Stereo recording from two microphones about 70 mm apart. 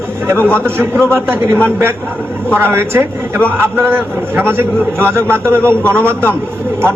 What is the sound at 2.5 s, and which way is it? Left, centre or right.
A man's voice, right.